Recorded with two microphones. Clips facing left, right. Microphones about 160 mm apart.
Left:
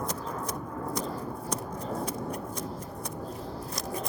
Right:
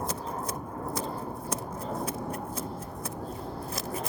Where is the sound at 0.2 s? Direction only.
35° right (ahead or behind).